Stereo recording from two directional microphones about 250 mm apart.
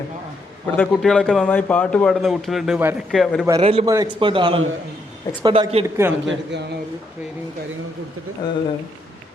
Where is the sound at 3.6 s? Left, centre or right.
Right.